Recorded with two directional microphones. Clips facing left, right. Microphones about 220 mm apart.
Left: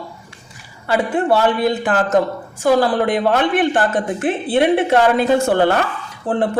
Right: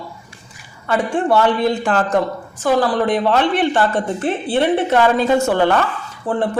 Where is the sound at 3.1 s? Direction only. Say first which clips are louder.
Even; 50° left (ahead or behind).